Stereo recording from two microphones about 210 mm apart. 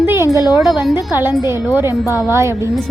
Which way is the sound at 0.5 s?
Centre (ahead or behind).